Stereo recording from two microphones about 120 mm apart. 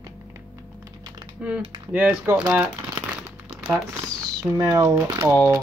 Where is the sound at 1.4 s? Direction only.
10° right (ahead or behind).